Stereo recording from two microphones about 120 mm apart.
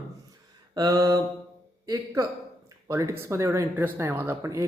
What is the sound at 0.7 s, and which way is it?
Mantra, 30° right (ahead or behind).